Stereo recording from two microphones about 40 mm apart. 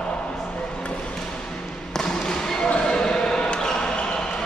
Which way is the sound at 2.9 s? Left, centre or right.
Centre.